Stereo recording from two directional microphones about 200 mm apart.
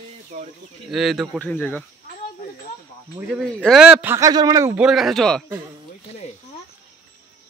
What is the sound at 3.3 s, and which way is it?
A man's voice, centre (ahead or behind).